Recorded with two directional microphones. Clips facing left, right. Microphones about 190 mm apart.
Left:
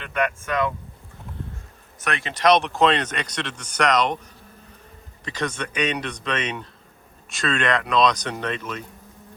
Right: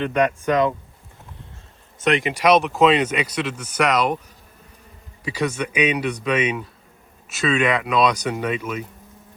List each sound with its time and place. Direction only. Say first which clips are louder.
0.1 s speech: right 1 dB; 35° right (ahead or behind)
0.4 s speech: right 7 dB; 20° right (ahead or behind)
2.0 s speech: right 6 dB; 20° right (ahead or behind)
5.2 s speech: right 4 dB; 10° right (ahead or behind)